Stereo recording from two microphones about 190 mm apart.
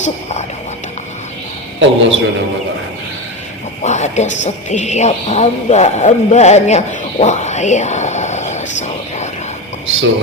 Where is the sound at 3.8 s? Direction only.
35° left (ahead or behind).